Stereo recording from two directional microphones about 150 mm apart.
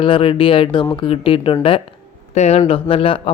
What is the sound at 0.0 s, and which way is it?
Speech, 35° left (ahead or behind).